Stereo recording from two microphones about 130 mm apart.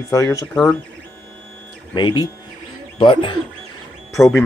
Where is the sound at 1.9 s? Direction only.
35° left (ahead or behind).